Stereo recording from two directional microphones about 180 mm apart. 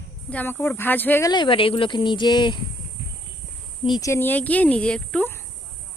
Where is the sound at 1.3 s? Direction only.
25° left (ahead or behind).